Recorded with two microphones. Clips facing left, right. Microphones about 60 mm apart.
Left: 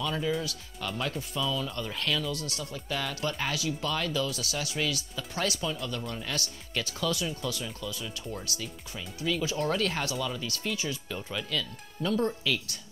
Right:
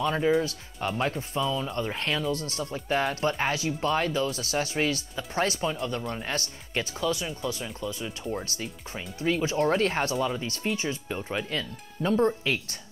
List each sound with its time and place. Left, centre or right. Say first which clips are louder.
0.0 s speech: right 6 dB; right